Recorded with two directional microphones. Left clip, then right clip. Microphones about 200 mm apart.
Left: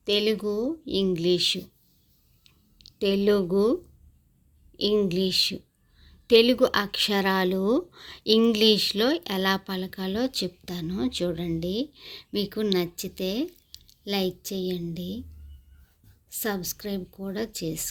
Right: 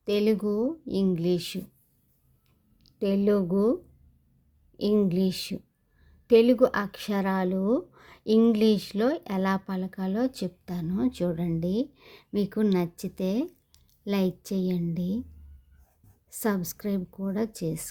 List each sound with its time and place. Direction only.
0.0 s a woman's voice: 5° right (ahead or behind)
2.4 s a sound: 5° right (ahead or behind)
4.8 s a woman's voice: 5° right (ahead or behind)
16.3 s a woman's voice: 15° right (ahead or behind)